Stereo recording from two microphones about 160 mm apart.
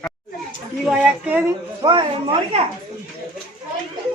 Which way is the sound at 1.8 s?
30° right (ahead or behind).